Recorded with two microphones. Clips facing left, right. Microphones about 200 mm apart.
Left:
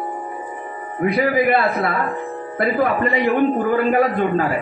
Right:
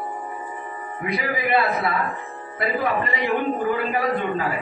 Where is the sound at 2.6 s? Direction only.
50° left (ahead or behind).